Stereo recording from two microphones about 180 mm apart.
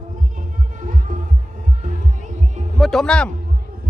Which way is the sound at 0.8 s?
45° right (ahead or behind).